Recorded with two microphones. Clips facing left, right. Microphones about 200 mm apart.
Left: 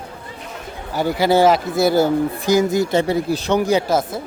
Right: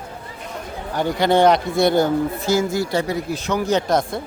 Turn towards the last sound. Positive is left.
turn(degrees=5)  # may be behind; listen again after turning